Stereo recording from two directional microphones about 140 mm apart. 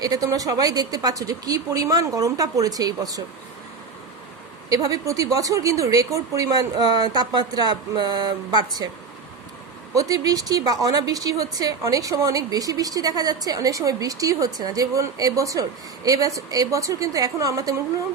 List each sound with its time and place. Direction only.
0.0 s a woman's voice: 25° right (ahead or behind)
4.7 s a woman's voice: 25° right (ahead or behind)
9.9 s a woman's voice: 25° right (ahead or behind)